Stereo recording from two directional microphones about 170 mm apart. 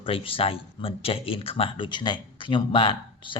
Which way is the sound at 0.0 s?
35° left (ahead or behind).